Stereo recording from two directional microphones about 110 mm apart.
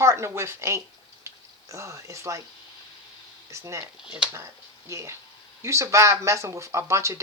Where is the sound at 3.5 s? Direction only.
25° right (ahead or behind).